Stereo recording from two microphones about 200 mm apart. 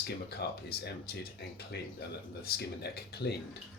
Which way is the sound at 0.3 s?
50° left (ahead or behind).